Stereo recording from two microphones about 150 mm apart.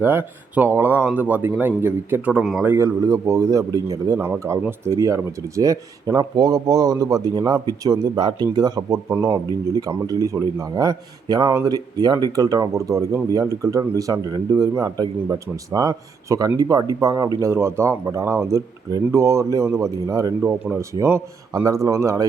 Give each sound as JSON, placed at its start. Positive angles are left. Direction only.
{"t": 0.0, "sound": "speech", "side_deg": -15}
{"t": 2.6, "sound": "speech", "side_deg": -20}